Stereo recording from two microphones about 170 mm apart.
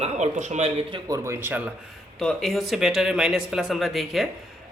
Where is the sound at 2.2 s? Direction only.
Centre (ahead or behind).